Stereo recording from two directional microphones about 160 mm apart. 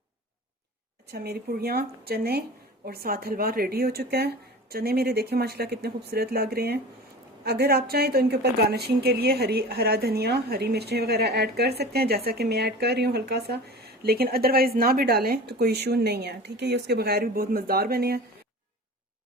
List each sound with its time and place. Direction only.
1.0 s a woman's voice: 85° right